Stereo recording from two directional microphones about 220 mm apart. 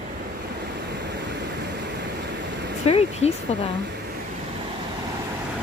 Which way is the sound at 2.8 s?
30° left (ahead or behind).